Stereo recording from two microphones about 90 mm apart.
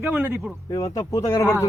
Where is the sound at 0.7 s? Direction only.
40° left (ahead or behind).